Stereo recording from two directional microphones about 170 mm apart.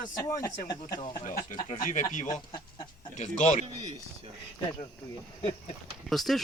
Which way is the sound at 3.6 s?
30° right (ahead or behind).